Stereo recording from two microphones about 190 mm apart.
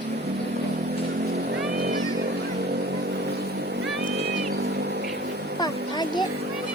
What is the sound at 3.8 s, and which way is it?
Vehicle, 60° right (ahead or behind).